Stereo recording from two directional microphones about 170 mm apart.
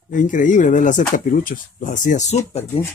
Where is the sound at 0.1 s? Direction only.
50° left (ahead or behind).